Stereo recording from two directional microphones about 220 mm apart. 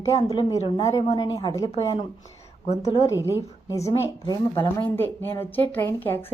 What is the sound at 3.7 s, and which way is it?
A woman's voice, 15° left (ahead or behind).